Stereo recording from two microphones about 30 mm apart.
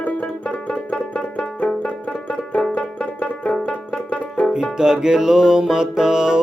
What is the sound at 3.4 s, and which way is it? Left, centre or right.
Banjo, left.